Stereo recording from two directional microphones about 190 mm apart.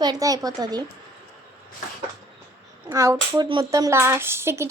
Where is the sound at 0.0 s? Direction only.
20° right (ahead or behind).